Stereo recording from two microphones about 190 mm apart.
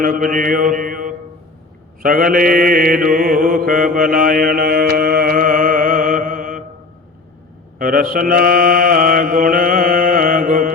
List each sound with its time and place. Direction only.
0.0 s mantra: 45° right (ahead or behind)
7.8 s a man's voice: 50° right (ahead or behind)
8.1 s mantra: 50° right (ahead or behind)